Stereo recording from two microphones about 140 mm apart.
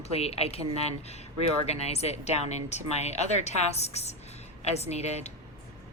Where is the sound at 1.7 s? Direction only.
50° left (ahead or behind).